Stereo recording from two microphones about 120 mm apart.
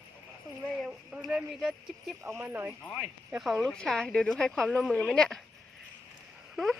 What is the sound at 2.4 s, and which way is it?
Speech, 15° right (ahead or behind).